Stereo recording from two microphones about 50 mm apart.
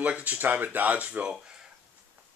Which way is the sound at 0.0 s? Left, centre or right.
Right.